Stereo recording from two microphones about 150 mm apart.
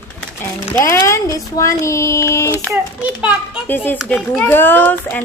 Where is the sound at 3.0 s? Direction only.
10° right (ahead or behind).